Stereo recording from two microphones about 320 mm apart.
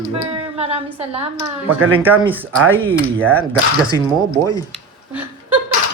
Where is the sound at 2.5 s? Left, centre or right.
Right.